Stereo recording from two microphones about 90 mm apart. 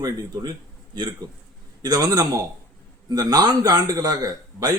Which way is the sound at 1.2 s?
50° right (ahead or behind).